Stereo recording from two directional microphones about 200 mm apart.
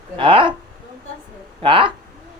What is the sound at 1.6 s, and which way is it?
Speech, 25° right (ahead or behind).